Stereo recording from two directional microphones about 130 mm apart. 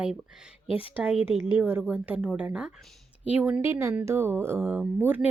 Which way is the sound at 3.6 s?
20° right (ahead or behind).